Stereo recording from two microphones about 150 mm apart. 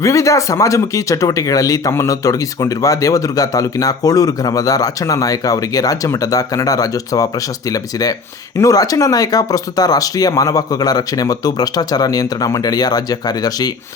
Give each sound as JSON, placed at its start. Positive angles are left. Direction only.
{"t": 0.0, "sound": "speech", "side_deg": 20}